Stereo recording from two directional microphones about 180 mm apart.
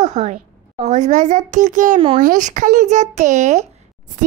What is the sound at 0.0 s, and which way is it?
A woman's voice, 40° right (ahead or behind).